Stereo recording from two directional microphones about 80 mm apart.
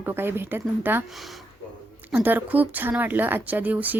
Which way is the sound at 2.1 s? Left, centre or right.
Right.